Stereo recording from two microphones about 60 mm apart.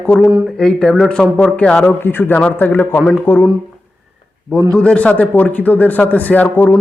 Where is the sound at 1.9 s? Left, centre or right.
Left.